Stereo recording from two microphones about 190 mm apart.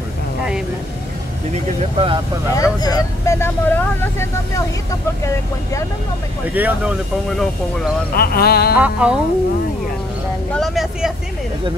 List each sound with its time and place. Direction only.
1.5 s speech: 30° right (ahead or behind)
2.5 s speech: 20° left (ahead or behind)
6.5 s speech: 10° right (ahead or behind)
8.2 s speech: 55° left (ahead or behind)
8.7 s speech: 5° right (ahead or behind)
10.5 s speech: centre (ahead or behind)